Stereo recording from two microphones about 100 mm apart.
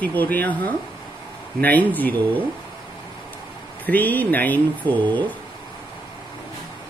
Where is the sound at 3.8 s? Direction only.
15° left (ahead or behind).